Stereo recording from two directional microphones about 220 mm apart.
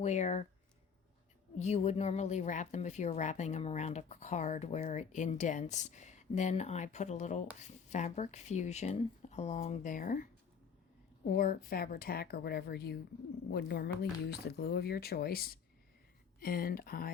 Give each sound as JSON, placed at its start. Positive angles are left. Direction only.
{"t": 0.0, "sound": "a woman's voice", "side_deg": 30}
{"t": 1.5, "sound": "a woman's voice", "side_deg": 30}
{"t": 11.3, "sound": "a woman's voice", "side_deg": 40}